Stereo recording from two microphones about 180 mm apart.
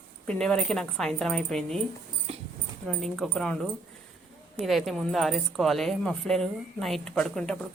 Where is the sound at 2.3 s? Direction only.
35° right (ahead or behind).